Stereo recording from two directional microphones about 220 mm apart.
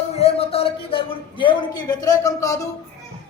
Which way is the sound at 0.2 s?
25° left (ahead or behind).